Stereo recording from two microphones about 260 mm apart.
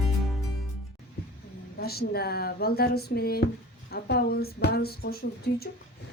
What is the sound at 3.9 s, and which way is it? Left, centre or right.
Speech, left.